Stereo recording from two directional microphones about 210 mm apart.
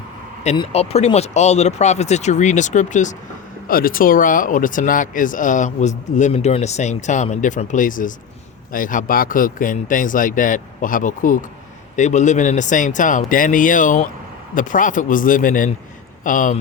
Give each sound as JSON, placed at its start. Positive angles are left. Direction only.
{"t": 0.4, "sound": "speech", "side_deg": 25}